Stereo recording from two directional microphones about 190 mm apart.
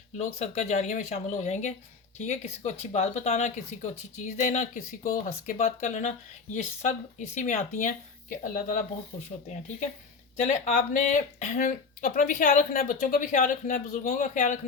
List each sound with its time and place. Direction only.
0.3 s speech: 35° left (ahead or behind)
10.3 s speech: 40° left (ahead or behind)